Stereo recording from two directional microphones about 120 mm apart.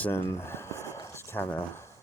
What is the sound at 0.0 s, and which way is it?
Speech, 20° left (ahead or behind).